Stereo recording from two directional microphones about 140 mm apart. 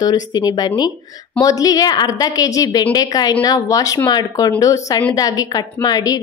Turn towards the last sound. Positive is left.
turn(degrees=25)  # may be behind; listen again after turning